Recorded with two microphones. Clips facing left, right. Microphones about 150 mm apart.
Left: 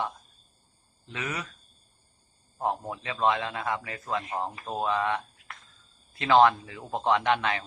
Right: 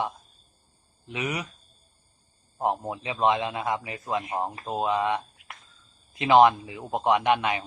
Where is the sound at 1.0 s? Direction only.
15° right (ahead or behind).